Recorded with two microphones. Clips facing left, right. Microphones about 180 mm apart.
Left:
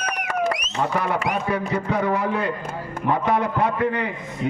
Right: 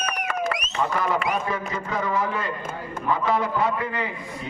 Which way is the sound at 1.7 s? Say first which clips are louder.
Left 5 dB; 65° left (ahead or behind).